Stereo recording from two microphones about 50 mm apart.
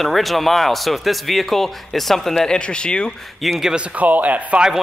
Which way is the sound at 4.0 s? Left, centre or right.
Right.